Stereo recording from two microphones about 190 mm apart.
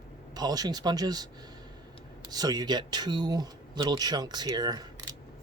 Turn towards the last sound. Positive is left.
turn(degrees=-20)  # may be behind; listen again after turning